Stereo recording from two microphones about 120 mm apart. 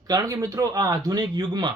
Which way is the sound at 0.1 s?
25° right (ahead or behind).